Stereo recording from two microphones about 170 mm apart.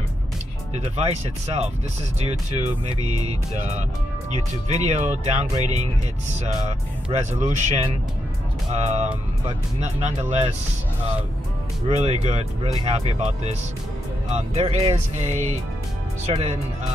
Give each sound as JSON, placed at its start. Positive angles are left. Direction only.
{"t": 0.7, "sound": "speech", "side_deg": -40}
{"t": 4.6, "sound": "speech", "side_deg": -40}
{"t": 7.1, "sound": "speech", "side_deg": -45}
{"t": 11.9, "sound": "speech", "side_deg": -40}